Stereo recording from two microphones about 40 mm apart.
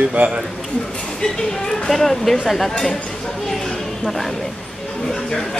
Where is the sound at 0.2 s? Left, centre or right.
Right.